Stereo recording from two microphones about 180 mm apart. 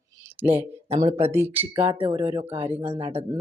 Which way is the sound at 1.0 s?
15° right (ahead or behind).